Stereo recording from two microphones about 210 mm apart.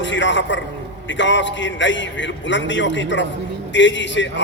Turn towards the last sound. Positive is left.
turn(degrees=60)  # may be behind; listen again after turning